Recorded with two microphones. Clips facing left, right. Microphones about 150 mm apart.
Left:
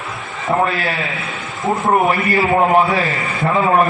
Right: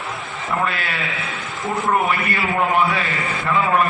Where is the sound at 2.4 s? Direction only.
35° left (ahead or behind).